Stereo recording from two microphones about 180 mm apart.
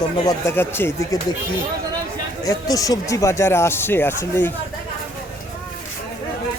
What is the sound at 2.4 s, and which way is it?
A man's voice, 20° left (ahead or behind).